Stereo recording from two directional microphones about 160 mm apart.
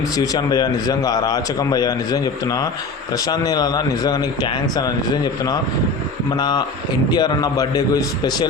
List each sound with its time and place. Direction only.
0.2 s a man's voice: 25° left (ahead or behind)